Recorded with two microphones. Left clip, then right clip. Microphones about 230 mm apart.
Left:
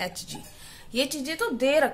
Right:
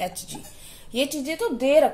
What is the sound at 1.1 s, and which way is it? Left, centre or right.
Speech, left.